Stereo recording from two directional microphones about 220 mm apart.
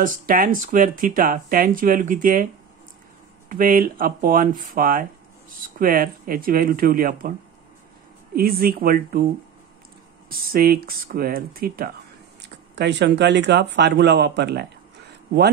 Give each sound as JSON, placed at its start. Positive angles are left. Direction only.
{"t": 0.0, "sound": "speech", "side_deg": -40}
{"t": 3.4, "sound": "speech", "side_deg": -40}
{"t": 8.4, "sound": "speech", "side_deg": -40}
{"t": 10.3, "sound": "speech", "side_deg": -40}